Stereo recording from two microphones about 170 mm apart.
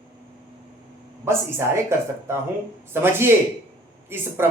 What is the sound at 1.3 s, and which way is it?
Speech, 15° right (ahead or behind).